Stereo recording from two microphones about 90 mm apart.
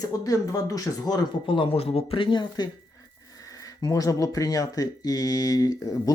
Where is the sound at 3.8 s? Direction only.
40° left (ahead or behind).